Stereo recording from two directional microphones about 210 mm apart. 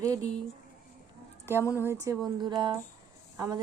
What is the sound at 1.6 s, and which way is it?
Speech, 15° left (ahead or behind).